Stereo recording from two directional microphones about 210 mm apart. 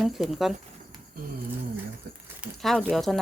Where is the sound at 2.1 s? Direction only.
50° right (ahead or behind).